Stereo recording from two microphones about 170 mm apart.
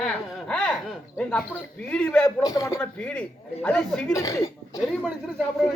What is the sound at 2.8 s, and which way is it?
A man's voice, 5° left (ahead or behind).